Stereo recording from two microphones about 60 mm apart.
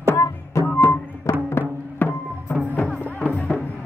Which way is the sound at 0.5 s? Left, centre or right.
Left.